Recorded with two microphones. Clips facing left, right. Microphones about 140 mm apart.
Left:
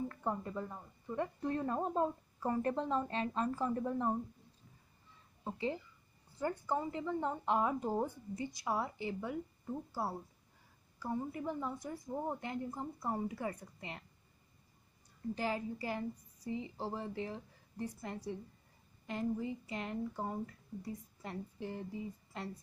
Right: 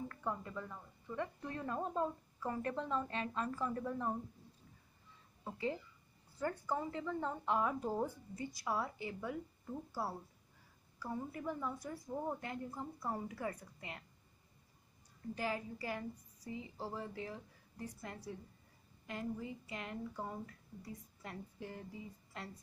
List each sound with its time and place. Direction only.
0.1 s speech: 30° left (ahead or behind)
5.4 s a woman's voice: 25° left (ahead or behind)
15.3 s a woman's voice: 30° left (ahead or behind)